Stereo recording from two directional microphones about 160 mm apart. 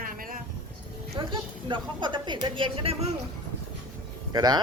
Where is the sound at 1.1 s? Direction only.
30° right (ahead or behind).